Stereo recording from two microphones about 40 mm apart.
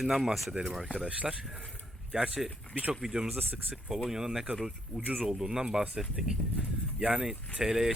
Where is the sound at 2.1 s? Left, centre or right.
Centre.